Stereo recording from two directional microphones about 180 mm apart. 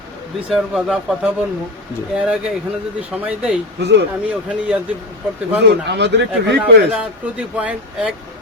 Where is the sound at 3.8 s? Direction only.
70° right (ahead or behind).